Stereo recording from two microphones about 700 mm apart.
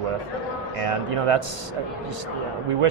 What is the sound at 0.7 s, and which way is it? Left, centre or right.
Speech, right.